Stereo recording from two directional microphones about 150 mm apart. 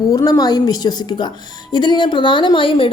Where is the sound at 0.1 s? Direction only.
25° left (ahead or behind).